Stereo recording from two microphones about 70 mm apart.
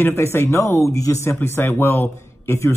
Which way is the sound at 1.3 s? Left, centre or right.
Left.